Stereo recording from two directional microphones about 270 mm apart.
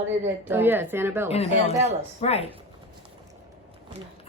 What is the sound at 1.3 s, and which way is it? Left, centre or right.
Speech, left.